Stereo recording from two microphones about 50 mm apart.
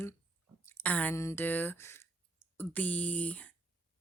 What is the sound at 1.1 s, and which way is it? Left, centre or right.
Speech, left.